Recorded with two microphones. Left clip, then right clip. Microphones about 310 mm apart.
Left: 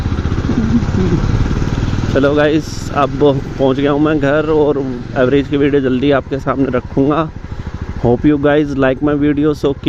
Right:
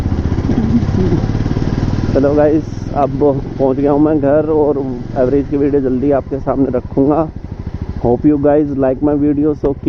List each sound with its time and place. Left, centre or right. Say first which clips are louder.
0.1 s vehicle: even; centre
1.4 s motorcycle: right 1 dB; centre
2.1 s speech: right 1 dB; left